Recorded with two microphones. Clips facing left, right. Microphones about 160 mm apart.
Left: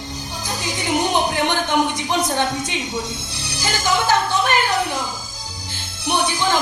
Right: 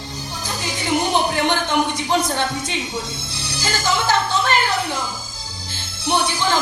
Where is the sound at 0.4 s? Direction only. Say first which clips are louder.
Even; 15° left (ahead or behind).